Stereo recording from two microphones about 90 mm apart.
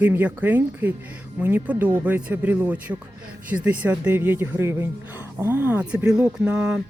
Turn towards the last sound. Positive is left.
turn(degrees=-10)  # may be behind; listen again after turning